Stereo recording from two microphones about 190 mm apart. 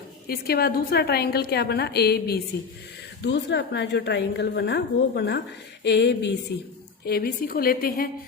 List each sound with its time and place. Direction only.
0.3 s a woman's voice: 55° left (ahead or behind)